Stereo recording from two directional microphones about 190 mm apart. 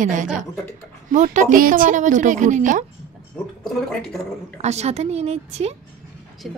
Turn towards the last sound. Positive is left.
turn(degrees=0)  # may be behind; listen again after turning